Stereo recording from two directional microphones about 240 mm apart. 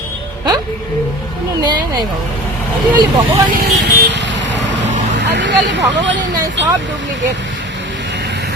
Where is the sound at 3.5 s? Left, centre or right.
Right.